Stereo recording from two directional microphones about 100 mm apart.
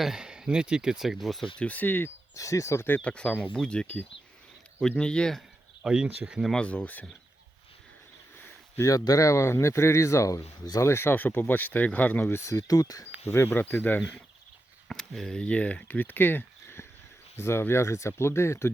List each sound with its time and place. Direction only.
0.0 s speech: 5° right (ahead or behind)
1.5 s speech: 15° left (ahead or behind)
2.3 s speech: 35° left (ahead or behind); by 5.4 s 10° left (ahead or behind)
5.8 s speech: 5° right (ahead or behind)
6.5 s speech: 10° left (ahead or behind)
8.8 s speech: 35° left (ahead or behind)
13.2 s speech: 25° left (ahead or behind)
14.8 s speech: centre (ahead or behind); by 18.7 s 25° left (ahead or behind)